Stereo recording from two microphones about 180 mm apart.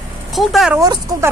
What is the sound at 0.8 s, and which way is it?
Speech, 20° right (ahead or behind).